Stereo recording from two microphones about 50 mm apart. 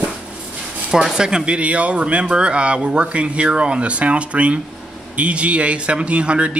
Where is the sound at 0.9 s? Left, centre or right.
Centre.